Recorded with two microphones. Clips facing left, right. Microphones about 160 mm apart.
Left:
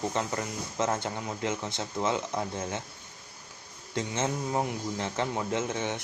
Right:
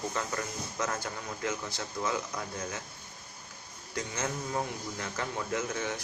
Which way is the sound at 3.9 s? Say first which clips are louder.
Left 5 dB; 25° left (ahead or behind).